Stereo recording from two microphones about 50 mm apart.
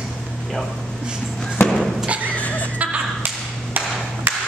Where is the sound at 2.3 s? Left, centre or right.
Left.